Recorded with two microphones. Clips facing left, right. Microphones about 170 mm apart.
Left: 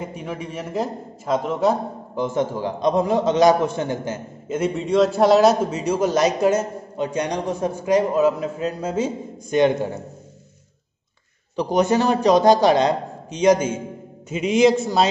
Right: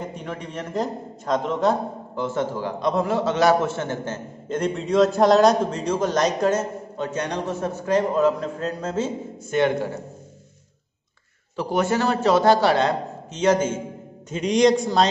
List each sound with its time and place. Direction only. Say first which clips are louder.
0.0 s a man's voice: left 2 dB; 5° left (ahead or behind)
11.5 s a man's voice: left 4 dB; 20° left (ahead or behind)